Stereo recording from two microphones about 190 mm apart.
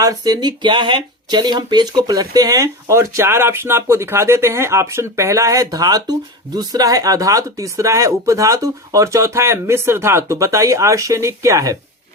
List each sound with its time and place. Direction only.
0.0 s speech: 20° right (ahead or behind)